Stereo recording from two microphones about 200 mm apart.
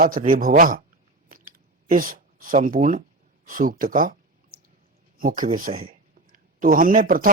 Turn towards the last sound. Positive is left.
turn(degrees=-45)  # may be behind; listen again after turning